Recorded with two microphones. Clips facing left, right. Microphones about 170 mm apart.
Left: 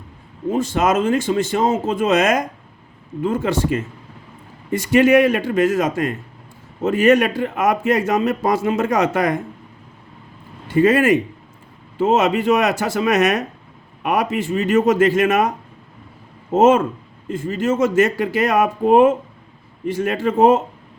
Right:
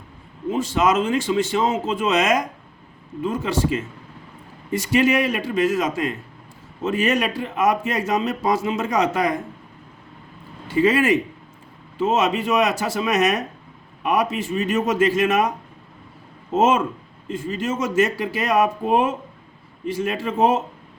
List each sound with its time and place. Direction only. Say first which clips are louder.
0.5 s a man's voice: left 2 dB; 50° left (ahead or behind)
10.8 s a man's voice: left 3 dB; 50° left (ahead or behind)
16.6 s a man's voice: left 5 dB; 55° left (ahead or behind)